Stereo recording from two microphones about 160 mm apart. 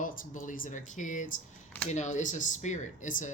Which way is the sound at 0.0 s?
60° left (ahead or behind).